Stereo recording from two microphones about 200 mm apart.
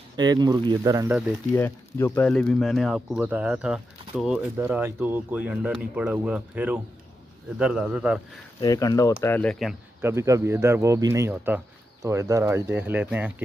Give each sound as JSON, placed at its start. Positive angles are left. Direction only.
{"t": 0.1, "sound": "speech", "side_deg": -20}
{"t": 1.5, "sound": "speech", "side_deg": 10}
{"t": 8.5, "sound": "speech", "side_deg": 15}
{"t": 10.0, "sound": "speech", "side_deg": -15}